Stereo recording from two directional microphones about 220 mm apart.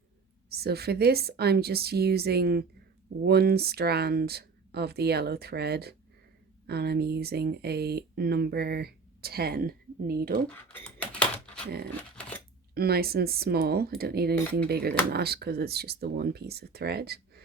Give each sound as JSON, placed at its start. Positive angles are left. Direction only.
{"t": 0.5, "sound": "speech", "side_deg": -45}
{"t": 10.7, "sound": "typewriter", "side_deg": 5}
{"t": 12.7, "sound": "speech", "side_deg": -45}